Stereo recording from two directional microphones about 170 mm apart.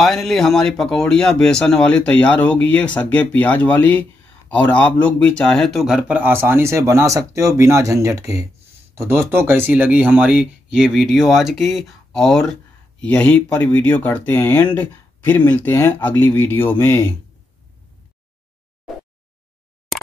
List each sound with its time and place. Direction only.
0.0 s speech: centre (ahead or behind)